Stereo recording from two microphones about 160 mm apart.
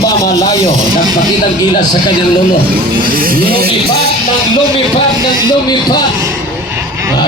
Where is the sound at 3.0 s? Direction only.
65° right (ahead or behind).